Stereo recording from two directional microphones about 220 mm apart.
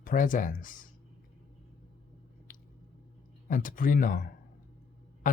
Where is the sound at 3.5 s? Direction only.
35° left (ahead or behind).